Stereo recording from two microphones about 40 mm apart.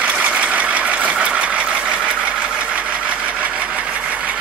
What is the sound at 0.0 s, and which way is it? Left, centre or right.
Vehicle, right.